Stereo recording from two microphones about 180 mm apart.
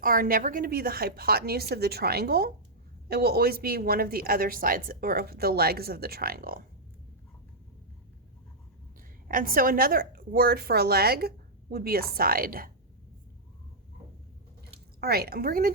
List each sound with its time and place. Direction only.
0.0 s a woman's voice: 55° right (ahead or behind)
9.2 s a woman's voice: 50° right (ahead or behind)
15.0 s a woman's voice: 60° right (ahead or behind)